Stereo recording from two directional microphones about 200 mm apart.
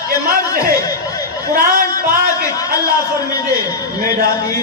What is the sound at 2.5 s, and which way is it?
A man's voice, 15° left (ahead or behind).